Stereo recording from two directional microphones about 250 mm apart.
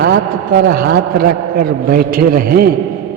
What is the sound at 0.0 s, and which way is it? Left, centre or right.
A man's voice, right.